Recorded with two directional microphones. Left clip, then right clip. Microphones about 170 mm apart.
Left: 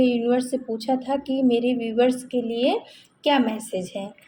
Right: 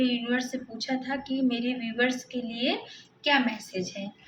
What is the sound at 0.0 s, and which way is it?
A woman's voice, 50° left (ahead or behind).